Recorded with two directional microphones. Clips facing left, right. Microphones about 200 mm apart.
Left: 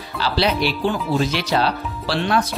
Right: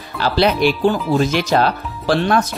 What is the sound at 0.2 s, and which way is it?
Speech, 50° right (ahead or behind).